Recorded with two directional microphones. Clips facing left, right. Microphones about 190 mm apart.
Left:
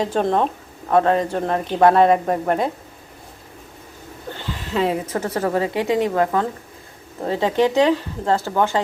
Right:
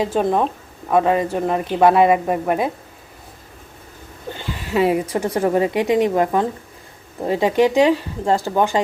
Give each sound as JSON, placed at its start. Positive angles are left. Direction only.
{"t": 0.0, "sound": "a woman's voice", "side_deg": -10}
{"t": 4.3, "sound": "a woman's voice", "side_deg": -10}